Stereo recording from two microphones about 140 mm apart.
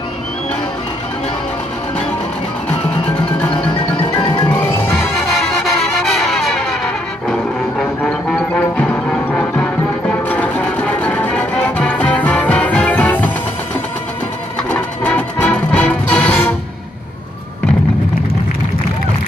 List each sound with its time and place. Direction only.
3.2 s music: 5° left (ahead or behind)
4.3 s music: 35° left (ahead or behind)
5.3 s music: centre (ahead or behind)
14.7 s music: 10° left (ahead or behind)